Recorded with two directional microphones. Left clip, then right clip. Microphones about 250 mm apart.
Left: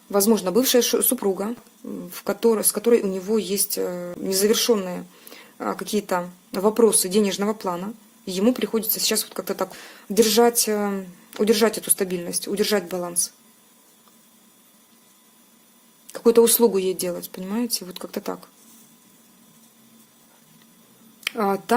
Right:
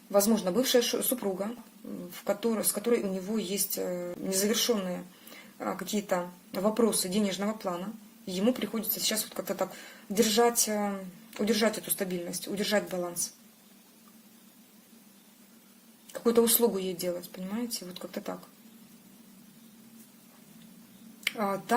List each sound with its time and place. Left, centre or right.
0.1 s speech: left
16.1 s speech: left
21.3 s speech: left